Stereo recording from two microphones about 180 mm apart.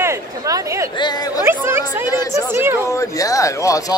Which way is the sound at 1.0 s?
20° left (ahead or behind).